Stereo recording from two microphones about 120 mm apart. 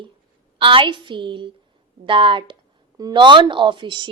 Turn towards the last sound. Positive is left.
turn(degrees=-40)  # may be behind; listen again after turning